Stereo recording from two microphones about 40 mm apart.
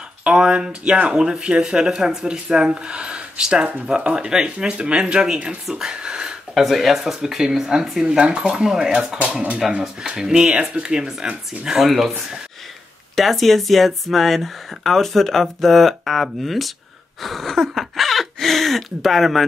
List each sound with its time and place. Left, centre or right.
0.2 s speech: right
6.5 s speech: centre
8.2 s speech: right
9.2 s speech: right
10.1 s speech: centre
11.8 s speech: centre
13.1 s speech: centre